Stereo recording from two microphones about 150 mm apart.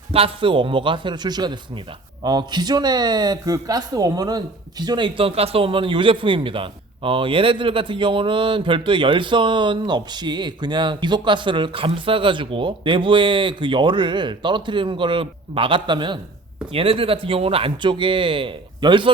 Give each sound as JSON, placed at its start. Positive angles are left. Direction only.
{"t": 0.1, "sound": "speech", "side_deg": -40}